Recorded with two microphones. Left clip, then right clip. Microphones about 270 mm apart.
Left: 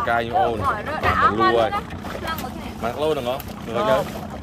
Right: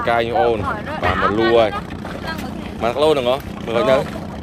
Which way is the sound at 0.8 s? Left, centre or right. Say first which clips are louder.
Even; centre.